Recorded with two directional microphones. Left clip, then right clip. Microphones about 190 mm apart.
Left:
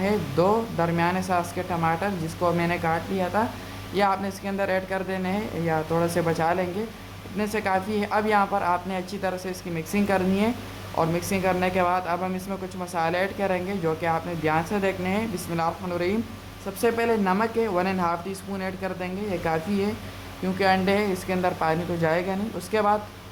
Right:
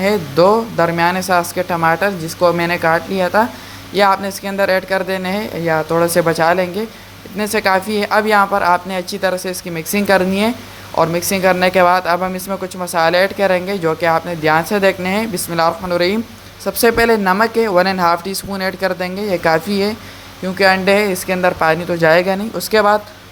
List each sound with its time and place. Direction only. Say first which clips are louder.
0.0 s speech: right 10 dB; 25° right (ahead or behind)